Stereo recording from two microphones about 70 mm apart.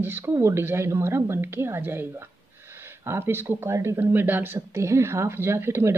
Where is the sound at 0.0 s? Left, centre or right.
Right.